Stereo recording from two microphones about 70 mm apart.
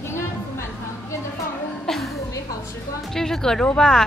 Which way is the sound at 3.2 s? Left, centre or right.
Centre.